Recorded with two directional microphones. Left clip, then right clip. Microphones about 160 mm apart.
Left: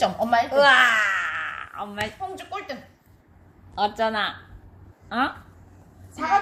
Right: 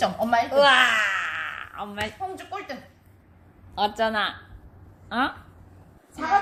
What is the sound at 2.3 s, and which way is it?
Speech, 45° left (ahead or behind).